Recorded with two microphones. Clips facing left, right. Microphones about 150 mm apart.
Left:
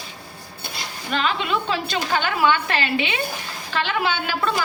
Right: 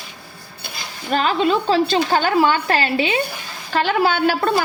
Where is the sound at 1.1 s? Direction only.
40° right (ahead or behind).